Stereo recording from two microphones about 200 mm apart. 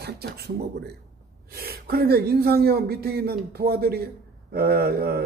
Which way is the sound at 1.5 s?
50° right (ahead or behind).